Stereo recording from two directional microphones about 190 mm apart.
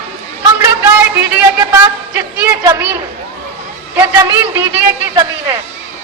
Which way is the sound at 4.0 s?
10° right (ahead or behind).